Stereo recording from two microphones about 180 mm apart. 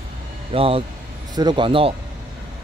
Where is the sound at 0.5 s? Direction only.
30° right (ahead or behind).